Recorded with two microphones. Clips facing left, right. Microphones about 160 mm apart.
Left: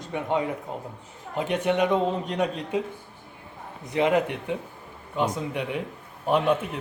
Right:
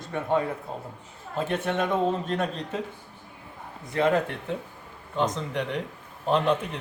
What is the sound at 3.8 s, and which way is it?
Speech, 20° left (ahead or behind).